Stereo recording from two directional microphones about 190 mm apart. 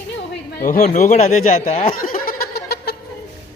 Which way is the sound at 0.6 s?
45° left (ahead or behind).